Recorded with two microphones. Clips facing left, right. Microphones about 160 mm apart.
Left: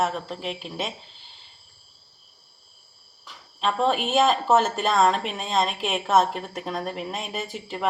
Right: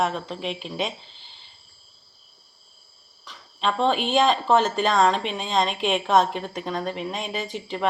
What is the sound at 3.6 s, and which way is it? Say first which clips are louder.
Speech: right 1 dB; 5° left (ahead or behind).